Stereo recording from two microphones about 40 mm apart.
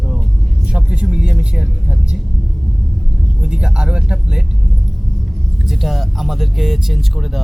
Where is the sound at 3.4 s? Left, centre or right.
Centre.